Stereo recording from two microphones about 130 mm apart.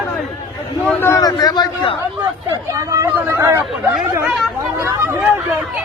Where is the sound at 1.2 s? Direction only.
30° left (ahead or behind).